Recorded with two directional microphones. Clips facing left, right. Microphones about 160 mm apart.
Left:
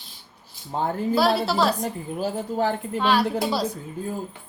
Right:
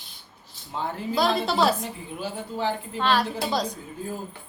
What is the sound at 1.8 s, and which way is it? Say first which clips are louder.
A woman's voice: left 6 dB; 45° left (ahead or behind).